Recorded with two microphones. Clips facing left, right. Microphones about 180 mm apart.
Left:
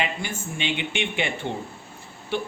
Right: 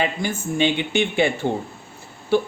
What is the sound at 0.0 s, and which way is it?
Speech, 40° right (ahead or behind).